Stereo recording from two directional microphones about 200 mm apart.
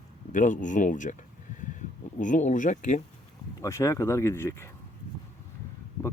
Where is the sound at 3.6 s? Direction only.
15° left (ahead or behind).